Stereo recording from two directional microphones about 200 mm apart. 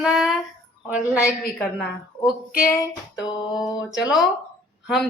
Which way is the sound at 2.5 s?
45° left (ahead or behind).